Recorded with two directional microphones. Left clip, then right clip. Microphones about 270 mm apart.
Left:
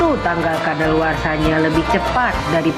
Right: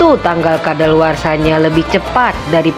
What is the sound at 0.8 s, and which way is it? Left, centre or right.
A woman's voice, right.